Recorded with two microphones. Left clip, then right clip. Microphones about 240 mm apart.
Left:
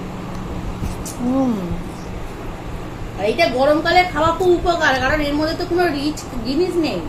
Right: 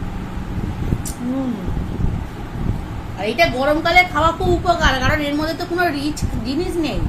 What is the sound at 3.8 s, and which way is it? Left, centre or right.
Speech, right.